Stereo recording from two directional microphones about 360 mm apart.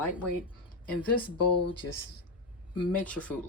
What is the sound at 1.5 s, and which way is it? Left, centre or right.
Speech, left.